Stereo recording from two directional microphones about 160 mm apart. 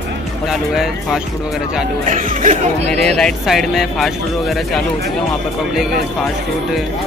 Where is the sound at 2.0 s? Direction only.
50° right (ahead or behind).